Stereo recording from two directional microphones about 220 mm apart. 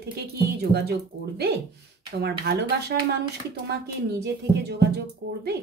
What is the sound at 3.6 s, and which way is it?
Speech, 50° right (ahead or behind).